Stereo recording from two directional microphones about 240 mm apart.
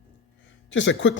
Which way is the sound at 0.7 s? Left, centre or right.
Left.